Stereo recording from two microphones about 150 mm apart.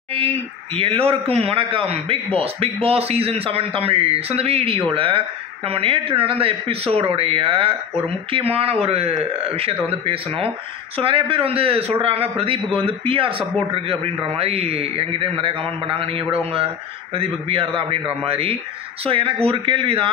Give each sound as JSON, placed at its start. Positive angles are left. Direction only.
{"t": 0.7, "sound": "speech", "side_deg": -40}